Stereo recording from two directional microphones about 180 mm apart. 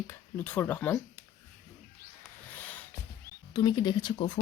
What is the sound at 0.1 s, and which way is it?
Speech, 10° left (ahead or behind).